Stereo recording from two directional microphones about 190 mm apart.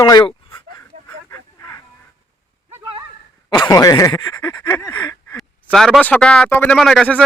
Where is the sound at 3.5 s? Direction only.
20° left (ahead or behind).